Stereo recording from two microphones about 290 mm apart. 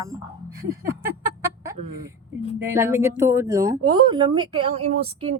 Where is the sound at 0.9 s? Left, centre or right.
Centre.